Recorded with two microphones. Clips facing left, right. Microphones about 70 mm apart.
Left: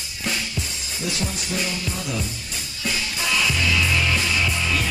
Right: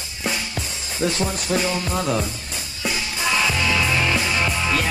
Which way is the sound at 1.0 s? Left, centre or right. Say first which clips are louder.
Right 7 dB; right.